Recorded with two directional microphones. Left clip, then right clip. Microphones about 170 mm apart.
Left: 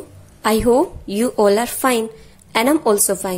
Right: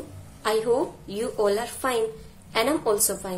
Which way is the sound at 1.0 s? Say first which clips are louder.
Left 9 dB; 45° left (ahead or behind).